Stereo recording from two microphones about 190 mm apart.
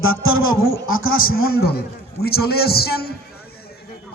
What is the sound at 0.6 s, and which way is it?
Speech, 55° left (ahead or behind).